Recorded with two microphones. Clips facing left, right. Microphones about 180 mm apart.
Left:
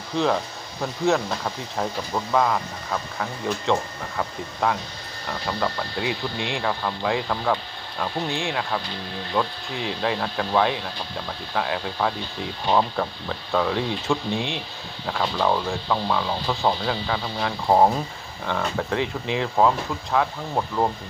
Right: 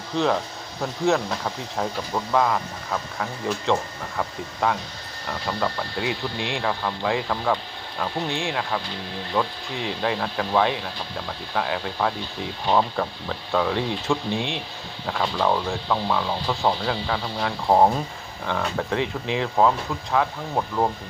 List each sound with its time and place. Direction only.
0.1 s speech: centre (ahead or behind)